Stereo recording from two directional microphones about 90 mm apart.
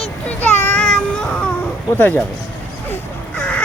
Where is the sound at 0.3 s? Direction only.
20° left (ahead or behind).